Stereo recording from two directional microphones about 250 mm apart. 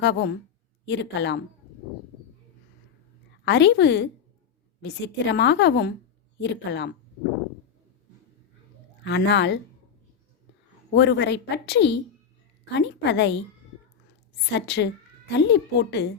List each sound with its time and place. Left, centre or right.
0.0 s a woman's voice: left
3.4 s a woman's voice: left
9.0 s a woman's voice: left
10.9 s a woman's voice: left
14.5 s a woman's voice: left